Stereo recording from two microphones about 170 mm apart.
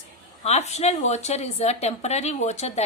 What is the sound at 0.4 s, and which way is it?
A woman's voice, 40° left (ahead or behind).